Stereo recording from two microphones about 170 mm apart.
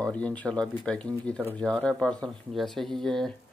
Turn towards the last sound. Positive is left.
turn(degrees=0)  # may be behind; listen again after turning